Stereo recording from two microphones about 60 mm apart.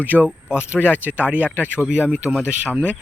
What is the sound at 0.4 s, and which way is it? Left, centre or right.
Speech, centre.